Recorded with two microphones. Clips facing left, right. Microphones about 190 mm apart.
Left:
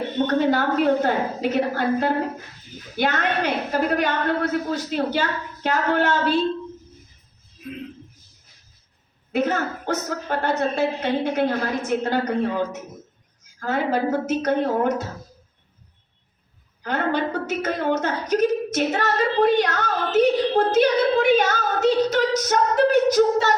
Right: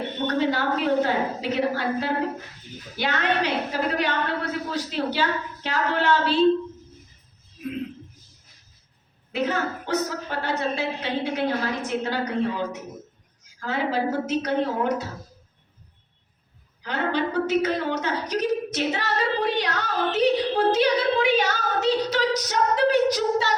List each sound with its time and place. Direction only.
0.3 s a woman's voice: 50° left (ahead or behind)
9.3 s a woman's voice: 50° left (ahead or behind)
13.6 s a woman's voice: 45° left (ahead or behind)
16.8 s a woman's voice: 50° left (ahead or behind)